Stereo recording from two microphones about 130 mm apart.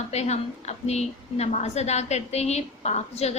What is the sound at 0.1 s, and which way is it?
A woman's voice, 60° left (ahead or behind).